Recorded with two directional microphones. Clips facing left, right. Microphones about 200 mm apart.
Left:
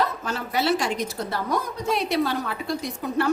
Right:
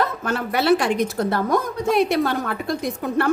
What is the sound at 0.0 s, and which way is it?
A woman's voice, 55° right (ahead or behind).